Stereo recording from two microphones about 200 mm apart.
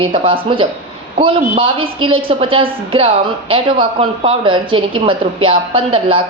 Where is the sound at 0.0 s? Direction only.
25° right (ahead or behind).